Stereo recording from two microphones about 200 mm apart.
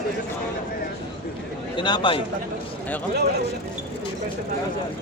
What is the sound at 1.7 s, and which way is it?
Speech, 25° left (ahead or behind).